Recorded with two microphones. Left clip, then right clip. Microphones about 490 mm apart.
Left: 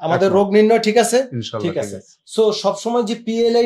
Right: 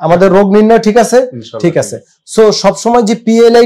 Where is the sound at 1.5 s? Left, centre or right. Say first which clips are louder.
Right 10 dB; left.